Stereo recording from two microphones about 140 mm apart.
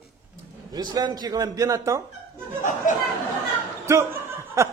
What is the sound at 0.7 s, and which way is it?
A man's voice, 30° right (ahead or behind).